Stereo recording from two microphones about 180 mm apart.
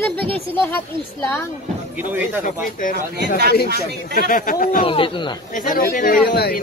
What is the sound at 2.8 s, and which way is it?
A man's voice, 50° left (ahead or behind).